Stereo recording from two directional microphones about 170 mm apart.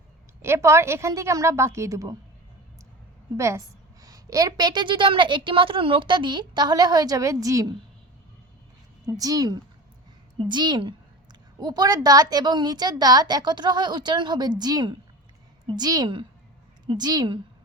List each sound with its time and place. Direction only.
0.4 s a woman's voice: 15° right (ahead or behind)
3.3 s a woman's voice: 15° right (ahead or behind)
9.0 s a woman's voice: 20° right (ahead or behind)